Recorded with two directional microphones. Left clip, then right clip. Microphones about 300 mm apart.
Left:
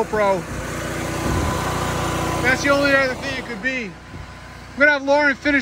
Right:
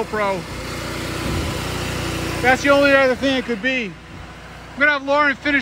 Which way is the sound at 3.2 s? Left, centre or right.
Centre.